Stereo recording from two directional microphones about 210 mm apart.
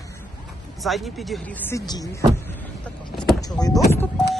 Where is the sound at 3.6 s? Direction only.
10° left (ahead or behind).